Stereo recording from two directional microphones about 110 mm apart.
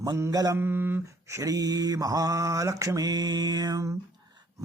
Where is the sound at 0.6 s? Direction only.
20° right (ahead or behind).